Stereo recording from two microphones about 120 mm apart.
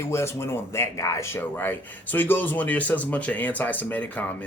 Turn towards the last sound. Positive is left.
turn(degrees=15)  # may be behind; listen again after turning